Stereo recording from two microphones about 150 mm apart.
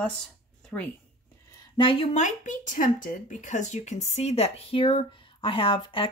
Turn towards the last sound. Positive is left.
turn(degrees=35)  # may be behind; listen again after turning